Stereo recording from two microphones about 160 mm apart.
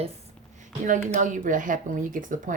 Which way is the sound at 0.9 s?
50° right (ahead or behind).